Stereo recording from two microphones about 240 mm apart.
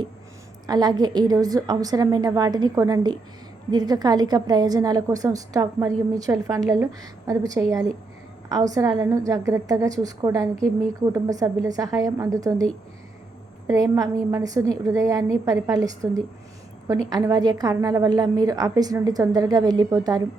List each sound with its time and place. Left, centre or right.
0.7 s a woman's voice: centre
8.7 s a woman's voice: centre
13.7 s a woman's voice: centre